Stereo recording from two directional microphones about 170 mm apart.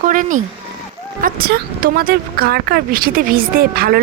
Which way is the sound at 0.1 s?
50° right (ahead or behind).